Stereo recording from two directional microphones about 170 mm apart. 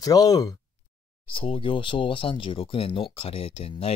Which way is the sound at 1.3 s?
35° left (ahead or behind).